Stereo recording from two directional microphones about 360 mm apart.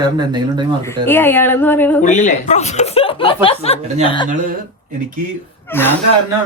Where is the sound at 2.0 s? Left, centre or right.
Centre.